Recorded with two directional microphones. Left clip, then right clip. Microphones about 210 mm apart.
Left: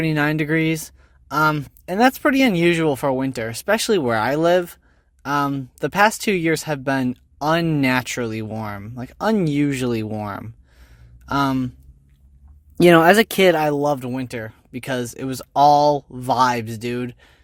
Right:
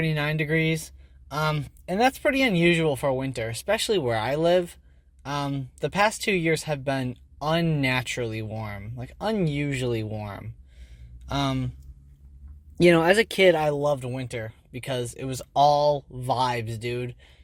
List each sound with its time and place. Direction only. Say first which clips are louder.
0.0 s speech: left 7 dB; 50° left (ahead or behind)
12.8 s speech: left 6 dB; 40° left (ahead or behind)